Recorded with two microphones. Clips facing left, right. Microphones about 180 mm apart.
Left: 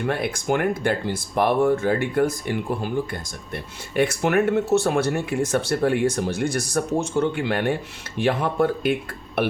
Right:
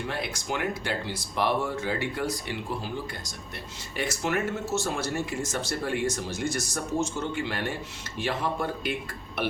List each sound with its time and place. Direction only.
0.0 s speech: 55° left (ahead or behind)